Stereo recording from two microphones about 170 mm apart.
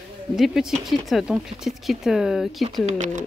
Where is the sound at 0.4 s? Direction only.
5° right (ahead or behind).